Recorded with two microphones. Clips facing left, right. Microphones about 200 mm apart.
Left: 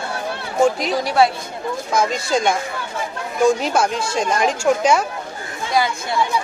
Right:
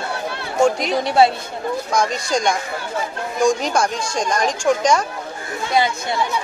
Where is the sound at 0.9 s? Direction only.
25° right (ahead or behind).